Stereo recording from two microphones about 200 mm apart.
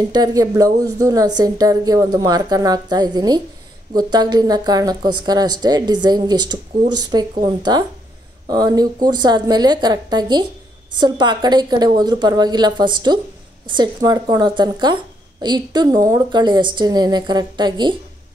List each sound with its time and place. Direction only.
0.1 s speech: 20° right (ahead or behind)